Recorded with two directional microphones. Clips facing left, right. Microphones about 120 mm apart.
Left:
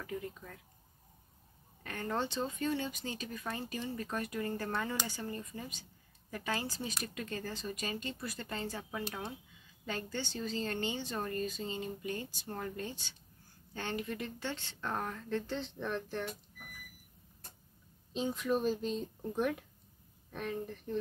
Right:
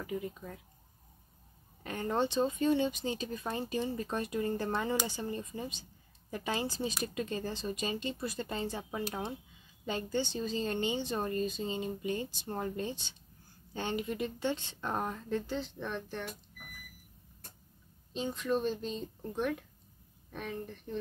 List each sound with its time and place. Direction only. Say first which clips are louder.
0.0 s speech: right 3 dB; 15° right (ahead or behind)
1.8 s a woman's voice: right 4 dB; 20° right (ahead or behind); by 16.3 s centre (ahead or behind)
18.1 s speech: even; centre (ahead or behind)